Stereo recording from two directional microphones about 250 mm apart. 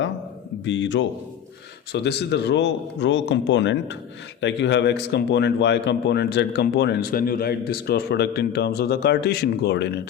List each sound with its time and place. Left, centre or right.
0.6 s a man's voice: left